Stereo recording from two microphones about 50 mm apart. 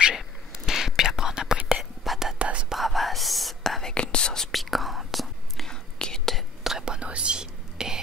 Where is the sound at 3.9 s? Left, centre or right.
Centre.